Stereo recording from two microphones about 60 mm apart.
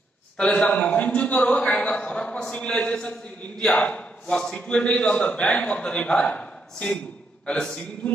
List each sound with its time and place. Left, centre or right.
0.4 s a man's voice: centre